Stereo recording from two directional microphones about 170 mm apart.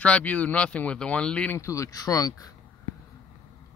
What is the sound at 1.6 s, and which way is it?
Speech, 20° left (ahead or behind).